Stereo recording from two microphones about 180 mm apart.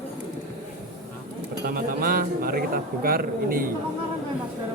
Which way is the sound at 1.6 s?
55° right (ahead or behind).